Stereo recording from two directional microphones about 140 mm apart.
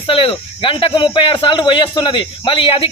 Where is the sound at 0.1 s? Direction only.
40° left (ahead or behind).